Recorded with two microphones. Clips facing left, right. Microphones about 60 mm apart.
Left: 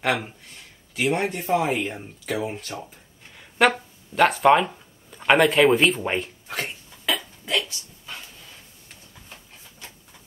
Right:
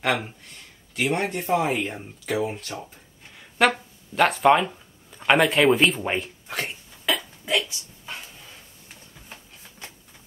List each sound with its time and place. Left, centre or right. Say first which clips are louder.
0.0 s speech: even; centre
7.4 s dog: right 2 dB; centre